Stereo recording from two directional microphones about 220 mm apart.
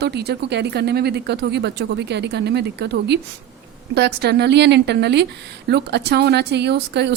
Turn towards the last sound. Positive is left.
turn(degrees=-50)  # may be behind; listen again after turning